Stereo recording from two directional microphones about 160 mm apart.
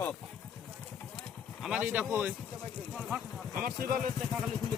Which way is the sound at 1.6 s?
5° right (ahead or behind).